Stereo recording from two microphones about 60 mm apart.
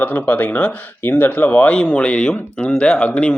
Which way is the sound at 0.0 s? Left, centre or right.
Left.